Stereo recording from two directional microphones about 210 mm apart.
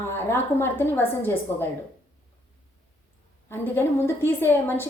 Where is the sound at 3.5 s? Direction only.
10° left (ahead or behind).